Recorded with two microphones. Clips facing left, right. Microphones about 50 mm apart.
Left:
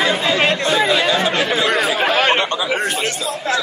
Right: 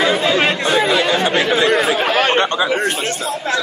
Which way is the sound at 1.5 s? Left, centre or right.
Centre.